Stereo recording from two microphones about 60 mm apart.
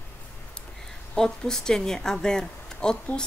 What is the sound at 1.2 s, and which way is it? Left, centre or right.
Speech, centre.